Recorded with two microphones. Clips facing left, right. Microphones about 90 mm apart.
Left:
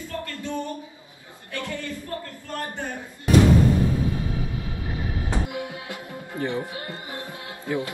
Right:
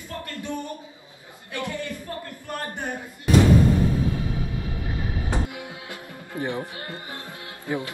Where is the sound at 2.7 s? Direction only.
20° right (ahead or behind).